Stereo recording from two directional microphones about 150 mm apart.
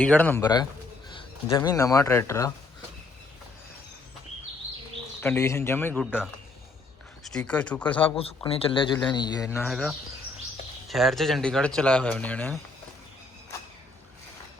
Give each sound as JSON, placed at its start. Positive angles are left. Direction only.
{"t": 0.0, "sound": "a man's voice", "side_deg": 10}
{"t": 0.4, "sound": "speech", "side_deg": 25}
{"t": 5.2, "sound": "a man's voice", "side_deg": 15}
{"t": 7.3, "sound": "a man's voice", "side_deg": 5}
{"t": 8.0, "sound": "speech", "side_deg": 40}
{"t": 9.6, "sound": "speech", "side_deg": 0}